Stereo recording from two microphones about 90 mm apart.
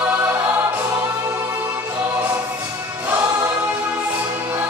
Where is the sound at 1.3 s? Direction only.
35° right (ahead or behind).